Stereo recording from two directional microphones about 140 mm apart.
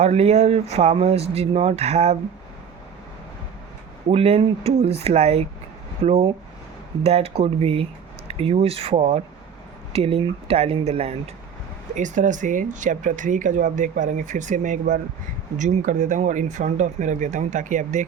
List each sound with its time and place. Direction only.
0.0 s speech: 50° right (ahead or behind)
4.1 s speech: 45° right (ahead or behind)
11.9 s speech: 65° right (ahead or behind)